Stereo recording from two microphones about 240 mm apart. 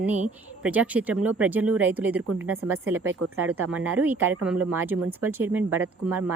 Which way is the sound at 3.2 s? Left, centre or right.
Right.